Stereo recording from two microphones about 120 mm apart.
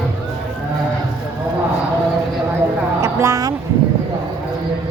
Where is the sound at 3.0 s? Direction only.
25° right (ahead or behind).